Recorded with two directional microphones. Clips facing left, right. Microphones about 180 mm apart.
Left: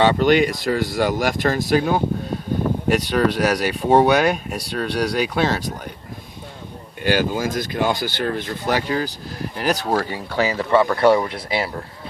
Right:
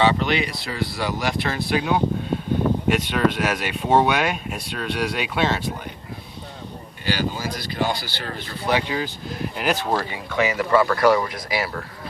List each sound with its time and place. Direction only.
0.0 s speech: 45° left (ahead or behind)
7.0 s speech: 50° left (ahead or behind); by 11.8 s 25° left (ahead or behind)